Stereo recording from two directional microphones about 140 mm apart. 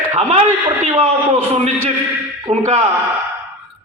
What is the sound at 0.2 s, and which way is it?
A man's voice, 45° right (ahead or behind).